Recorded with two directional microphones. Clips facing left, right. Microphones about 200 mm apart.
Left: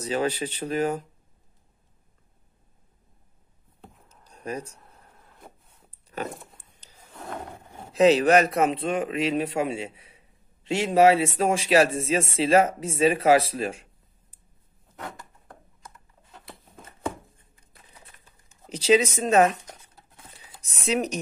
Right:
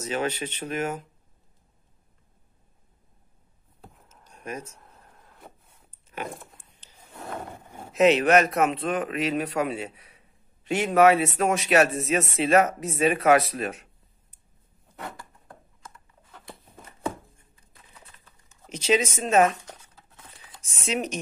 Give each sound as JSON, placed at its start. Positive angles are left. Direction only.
{"t": 0.0, "sound": "speech", "side_deg": 35}
{"t": 4.3, "sound": "speech", "side_deg": 35}
{"t": 6.1, "sound": "a sound", "side_deg": 40}
{"t": 7.6, "sound": "vehicle", "side_deg": -10}
{"t": 7.9, "sound": "speech", "side_deg": 30}
{"t": 15.9, "sound": "computer keyboard", "side_deg": 25}
{"t": 18.7, "sound": "speech", "side_deg": 35}
{"t": 20.8, "sound": "speech", "side_deg": 35}